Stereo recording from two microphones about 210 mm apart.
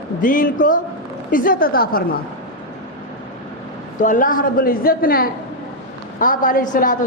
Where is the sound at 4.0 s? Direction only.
40° left (ahead or behind).